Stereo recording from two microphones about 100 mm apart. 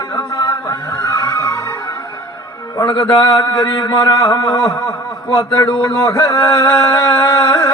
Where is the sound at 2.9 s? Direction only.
50° left (ahead or behind).